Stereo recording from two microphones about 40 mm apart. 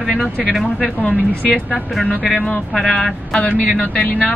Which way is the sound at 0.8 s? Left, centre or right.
Left.